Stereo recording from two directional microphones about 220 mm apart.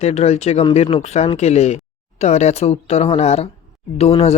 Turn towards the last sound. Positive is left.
turn(degrees=25)  # may be behind; listen again after turning